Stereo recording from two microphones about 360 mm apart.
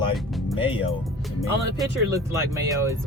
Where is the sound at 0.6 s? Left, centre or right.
Centre.